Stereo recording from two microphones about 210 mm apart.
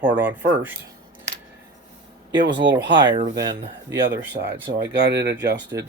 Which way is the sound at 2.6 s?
55° right (ahead or behind).